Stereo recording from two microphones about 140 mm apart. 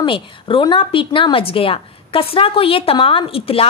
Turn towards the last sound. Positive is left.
turn(degrees=40)  # may be behind; listen again after turning